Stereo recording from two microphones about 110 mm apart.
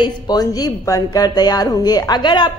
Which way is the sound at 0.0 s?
35° left (ahead or behind).